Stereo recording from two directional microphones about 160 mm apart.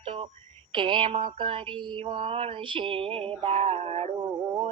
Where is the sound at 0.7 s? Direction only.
30° right (ahead or behind).